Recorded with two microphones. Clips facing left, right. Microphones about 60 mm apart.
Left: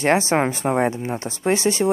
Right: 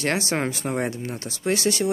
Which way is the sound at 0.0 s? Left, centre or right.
Left.